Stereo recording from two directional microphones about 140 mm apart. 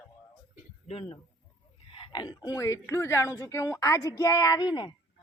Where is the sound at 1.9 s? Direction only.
35° left (ahead or behind).